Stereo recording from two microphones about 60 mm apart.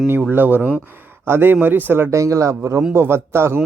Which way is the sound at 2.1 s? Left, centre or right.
Right.